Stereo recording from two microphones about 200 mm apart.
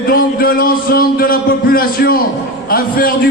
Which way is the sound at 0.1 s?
45° left (ahead or behind).